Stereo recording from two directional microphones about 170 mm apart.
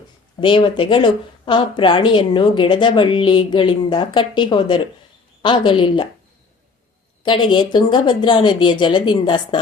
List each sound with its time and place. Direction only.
0.3 s speech: 30° left (ahead or behind)
7.3 s speech: 25° left (ahead or behind)